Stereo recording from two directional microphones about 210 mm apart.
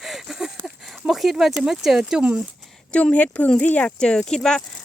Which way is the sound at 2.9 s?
5° left (ahead or behind).